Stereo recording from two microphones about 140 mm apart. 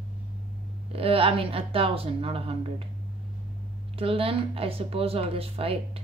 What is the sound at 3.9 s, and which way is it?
Speech, 40° right (ahead or behind).